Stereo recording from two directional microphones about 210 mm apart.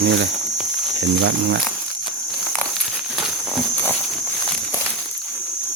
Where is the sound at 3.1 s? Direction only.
Centre (ahead or behind).